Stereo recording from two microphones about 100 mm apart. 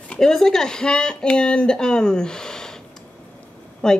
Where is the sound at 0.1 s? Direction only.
5° left (ahead or behind).